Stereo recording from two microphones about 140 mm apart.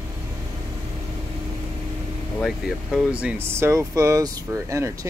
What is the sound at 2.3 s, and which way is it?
Speech, centre (ahead or behind).